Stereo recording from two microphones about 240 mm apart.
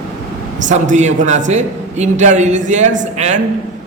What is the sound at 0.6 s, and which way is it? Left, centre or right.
A man's voice, right.